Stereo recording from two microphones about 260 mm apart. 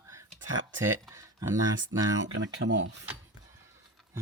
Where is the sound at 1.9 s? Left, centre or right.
Centre.